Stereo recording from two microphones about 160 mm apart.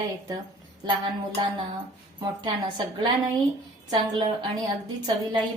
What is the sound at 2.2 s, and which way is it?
A woman's voice, 25° right (ahead or behind).